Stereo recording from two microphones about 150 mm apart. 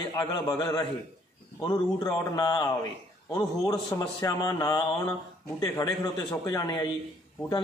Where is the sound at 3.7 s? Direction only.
20° left (ahead or behind).